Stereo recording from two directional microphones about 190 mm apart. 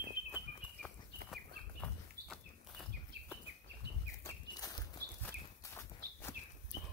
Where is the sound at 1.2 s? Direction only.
Centre (ahead or behind).